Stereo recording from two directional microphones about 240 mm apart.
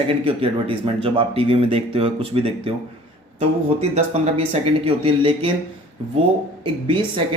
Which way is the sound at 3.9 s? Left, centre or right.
Right.